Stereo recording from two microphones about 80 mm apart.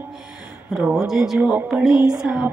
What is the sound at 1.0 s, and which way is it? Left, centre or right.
Music, centre.